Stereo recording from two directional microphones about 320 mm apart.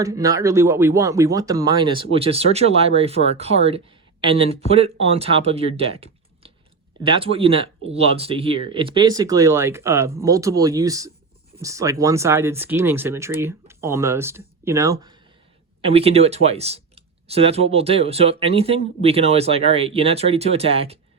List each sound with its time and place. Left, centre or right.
0.0 s speech: centre